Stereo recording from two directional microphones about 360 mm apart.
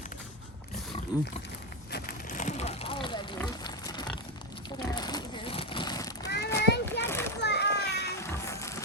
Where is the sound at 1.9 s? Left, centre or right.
Left.